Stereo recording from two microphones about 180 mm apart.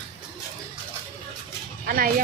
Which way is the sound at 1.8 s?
55° right (ahead or behind).